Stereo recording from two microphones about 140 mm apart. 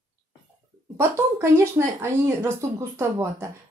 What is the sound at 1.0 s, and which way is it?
A woman's voice, 20° right (ahead or behind).